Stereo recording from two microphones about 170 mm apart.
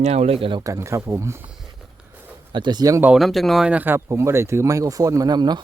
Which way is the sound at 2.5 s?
25° right (ahead or behind).